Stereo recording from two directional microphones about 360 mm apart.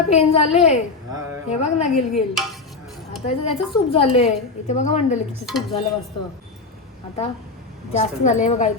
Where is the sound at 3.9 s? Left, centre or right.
Centre.